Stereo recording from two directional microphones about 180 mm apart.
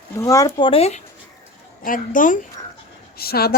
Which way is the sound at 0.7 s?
35° left (ahead or behind).